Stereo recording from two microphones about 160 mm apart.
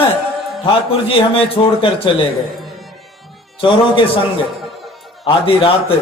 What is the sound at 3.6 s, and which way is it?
Speech, 30° left (ahead or behind).